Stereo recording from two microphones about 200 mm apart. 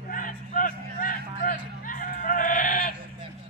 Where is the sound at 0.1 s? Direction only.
40° left (ahead or behind).